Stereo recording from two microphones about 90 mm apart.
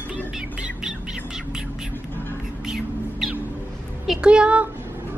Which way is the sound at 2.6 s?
5° right (ahead or behind).